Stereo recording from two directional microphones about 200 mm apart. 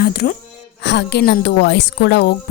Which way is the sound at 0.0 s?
50° left (ahead or behind).